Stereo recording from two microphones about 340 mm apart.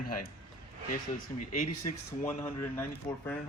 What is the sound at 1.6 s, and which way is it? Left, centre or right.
Speech, left.